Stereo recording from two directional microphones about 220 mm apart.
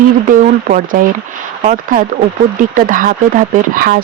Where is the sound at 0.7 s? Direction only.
40° right (ahead or behind).